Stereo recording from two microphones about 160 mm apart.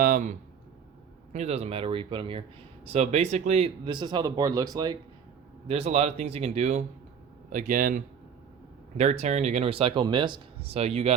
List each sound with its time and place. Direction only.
0.0 s a sound: 55° right (ahead or behind)
1.3 s speech: 45° right (ahead or behind)
2.9 s speech: 45° right (ahead or behind)
3.8 s speech: 30° right (ahead or behind)
5.6 s speech: 40° right (ahead or behind); by 8.0 s 60° right (ahead or behind)
9.0 s speech: 45° right (ahead or behind)